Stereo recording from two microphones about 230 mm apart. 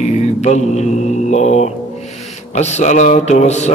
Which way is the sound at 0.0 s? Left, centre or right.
Left.